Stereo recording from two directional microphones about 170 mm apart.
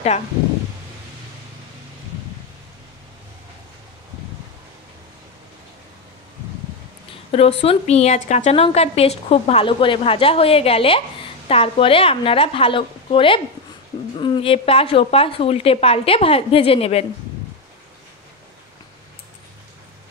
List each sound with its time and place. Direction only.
7.2 s a woman's voice: 35° left (ahead or behind)